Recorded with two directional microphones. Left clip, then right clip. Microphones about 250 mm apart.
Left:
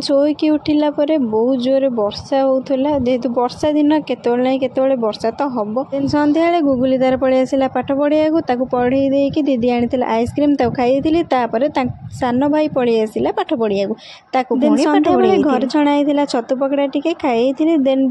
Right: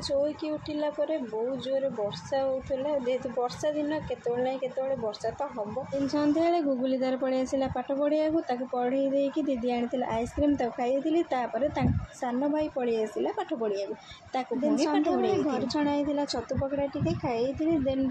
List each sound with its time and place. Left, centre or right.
0.2 s a woman's voice: left